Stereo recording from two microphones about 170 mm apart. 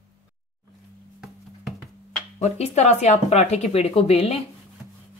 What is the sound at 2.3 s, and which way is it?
Speech, 40° left (ahead or behind).